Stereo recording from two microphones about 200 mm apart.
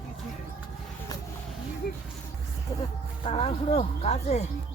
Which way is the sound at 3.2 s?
30° left (ahead or behind).